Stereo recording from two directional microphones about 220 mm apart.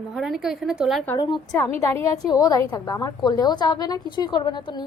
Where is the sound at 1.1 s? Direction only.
20° left (ahead or behind).